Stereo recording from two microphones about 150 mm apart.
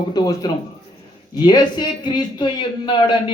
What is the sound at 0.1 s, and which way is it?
A man's voice, 25° left (ahead or behind).